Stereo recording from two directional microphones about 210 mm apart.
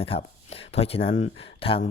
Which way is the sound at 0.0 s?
25° left (ahead or behind).